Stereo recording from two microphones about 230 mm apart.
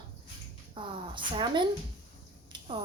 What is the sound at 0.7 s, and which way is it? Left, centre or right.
Speech, right.